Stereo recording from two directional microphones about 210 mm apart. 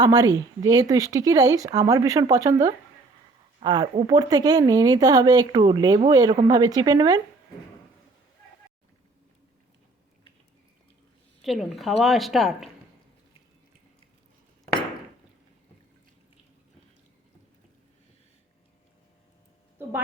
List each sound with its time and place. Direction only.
0.0 s speech: 15° right (ahead or behind)
3.6 s speech: 20° right (ahead or behind)
11.4 s a woman's voice: centre (ahead or behind)